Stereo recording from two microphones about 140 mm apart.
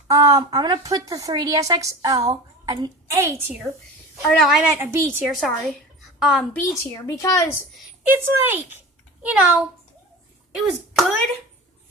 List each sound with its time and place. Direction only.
0.1 s a woman's voice: 25° right (ahead or behind)
4.2 s a woman's voice: 5° left (ahead or behind)
4.8 s a woman's voice: 20° right (ahead or behind)
5.2 s a woman's voice: centre (ahead or behind)
6.9 s speech: 25° left (ahead or behind)
8.1 s a child's voice: 15° right (ahead or behind)